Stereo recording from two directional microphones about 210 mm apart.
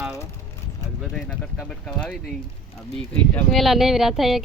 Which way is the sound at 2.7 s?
Centre (ahead or behind).